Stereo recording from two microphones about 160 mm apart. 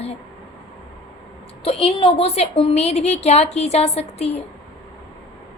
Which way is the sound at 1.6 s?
35° left (ahead or behind).